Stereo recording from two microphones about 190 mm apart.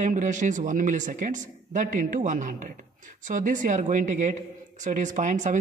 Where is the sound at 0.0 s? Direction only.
40° right (ahead or behind).